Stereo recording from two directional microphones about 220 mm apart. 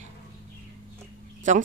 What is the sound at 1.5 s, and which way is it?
Speech, 35° right (ahead or behind).